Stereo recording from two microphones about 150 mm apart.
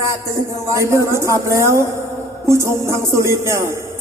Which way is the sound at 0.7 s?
20° right (ahead or behind).